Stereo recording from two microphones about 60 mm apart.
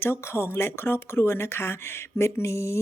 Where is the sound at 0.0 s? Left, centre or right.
Left.